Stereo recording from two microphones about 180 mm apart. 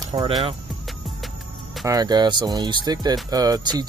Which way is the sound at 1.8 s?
20° right (ahead or behind).